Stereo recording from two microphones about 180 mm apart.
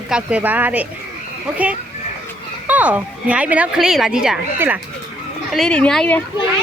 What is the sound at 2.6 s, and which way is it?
Speech, 10° right (ahead or behind).